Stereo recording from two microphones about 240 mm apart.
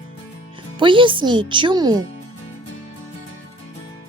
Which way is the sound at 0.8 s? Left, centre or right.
Right.